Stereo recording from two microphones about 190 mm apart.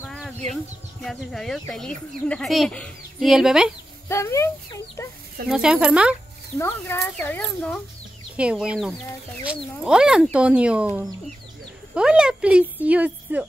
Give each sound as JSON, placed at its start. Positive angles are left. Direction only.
{"t": 0.0, "sound": "a sound", "side_deg": 5}
{"t": 1.0, "sound": "speech", "side_deg": 0}
{"t": 4.1, "sound": "speech", "side_deg": 15}
{"t": 5.5, "sound": "speech", "side_deg": -5}
{"t": 6.6, "sound": "speech", "side_deg": 15}
{"t": 8.4, "sound": "speech", "side_deg": -5}